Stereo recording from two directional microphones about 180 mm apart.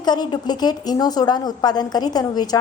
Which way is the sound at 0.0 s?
25° left (ahead or behind).